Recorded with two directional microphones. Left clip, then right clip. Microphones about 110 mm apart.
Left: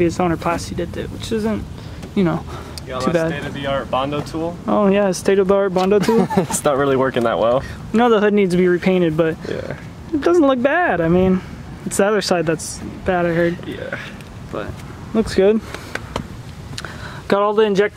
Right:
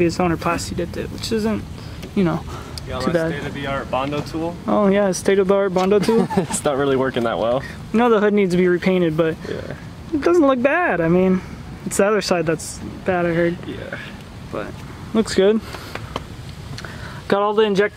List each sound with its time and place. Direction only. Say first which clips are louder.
0.0 s speech: left 1 dB; 10° right (ahead or behind)
3.3 s speech: left 2 dB; 15° left (ahead or behind)
4.6 s speech: left 1 dB; 5° right (ahead or behind)
5.9 s speech: left 2 dB; 30° left (ahead or behind)
8.0 s speech: left 2 dB; 5° right (ahead or behind)
15.1 s speech: left 1 dB; 5° right (ahead or behind)
17.3 s speech: left 2 dB; centre (ahead or behind)